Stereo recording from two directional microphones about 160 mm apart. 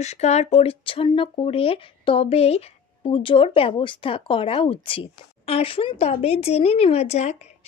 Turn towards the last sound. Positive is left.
turn(degrees=45)  # may be behind; listen again after turning